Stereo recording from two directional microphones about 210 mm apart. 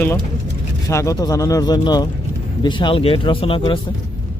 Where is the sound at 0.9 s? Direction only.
15° left (ahead or behind).